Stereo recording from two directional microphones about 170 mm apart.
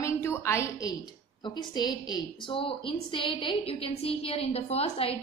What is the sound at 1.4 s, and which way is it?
A woman's voice, 25° left (ahead or behind).